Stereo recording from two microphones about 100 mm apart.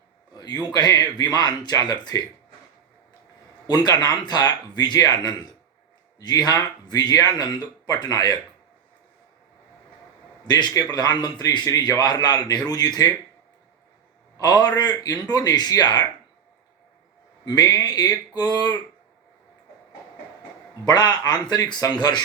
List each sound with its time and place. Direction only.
0.3 s a sound: 40° left (ahead or behind)
0.7 s speech: 40° left (ahead or behind)
3.7 s speech: 40° left (ahead or behind)
10.4 s a man's voice: 45° left (ahead or behind)
14.3 s speech: 40° left (ahead or behind)
17.4 s speech: 40° left (ahead or behind)
20.8 s a man's voice: 45° left (ahead or behind)